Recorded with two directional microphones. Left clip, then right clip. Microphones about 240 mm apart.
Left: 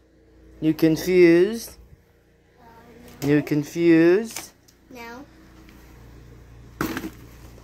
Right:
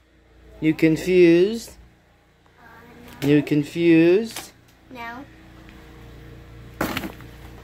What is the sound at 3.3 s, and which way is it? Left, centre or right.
Speech, centre.